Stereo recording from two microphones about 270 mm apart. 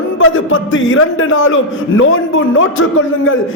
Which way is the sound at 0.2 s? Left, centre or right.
Left.